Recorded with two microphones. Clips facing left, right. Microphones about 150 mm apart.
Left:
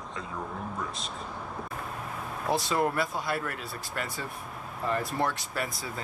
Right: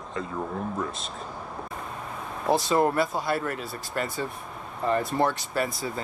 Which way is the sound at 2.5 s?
Centre (ahead or behind).